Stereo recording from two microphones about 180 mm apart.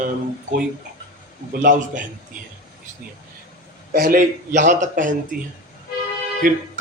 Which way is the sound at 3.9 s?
55° right (ahead or behind).